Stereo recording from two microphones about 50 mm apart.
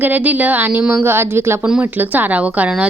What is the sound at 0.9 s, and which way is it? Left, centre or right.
Speech, right.